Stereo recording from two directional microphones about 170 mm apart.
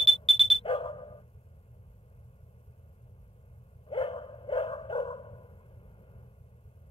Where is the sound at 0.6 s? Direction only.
30° left (ahead or behind).